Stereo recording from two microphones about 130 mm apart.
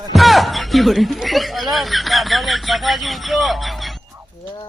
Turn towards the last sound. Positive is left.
turn(degrees=0)  # may be behind; listen again after turning